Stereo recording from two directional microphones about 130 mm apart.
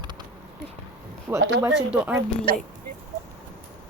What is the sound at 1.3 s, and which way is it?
Speech, 25° right (ahead or behind).